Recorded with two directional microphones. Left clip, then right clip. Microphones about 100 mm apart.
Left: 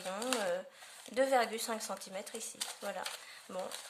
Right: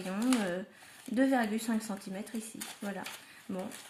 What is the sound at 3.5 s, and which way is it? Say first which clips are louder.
Speech: right 1 dB; 30° left (ahead or behind).